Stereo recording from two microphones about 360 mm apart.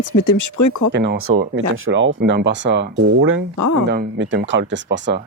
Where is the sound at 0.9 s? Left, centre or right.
Right.